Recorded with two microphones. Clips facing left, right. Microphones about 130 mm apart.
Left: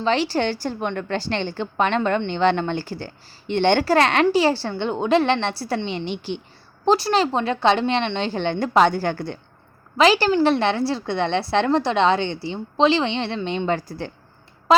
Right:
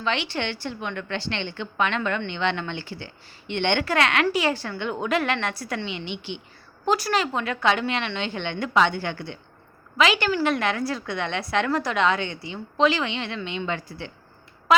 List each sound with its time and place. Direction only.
0.0 s a woman's voice: 35° left (ahead or behind)
14.7 s tick: 30° left (ahead or behind)